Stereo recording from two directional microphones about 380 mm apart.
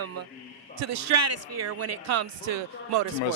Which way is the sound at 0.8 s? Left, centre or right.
Right.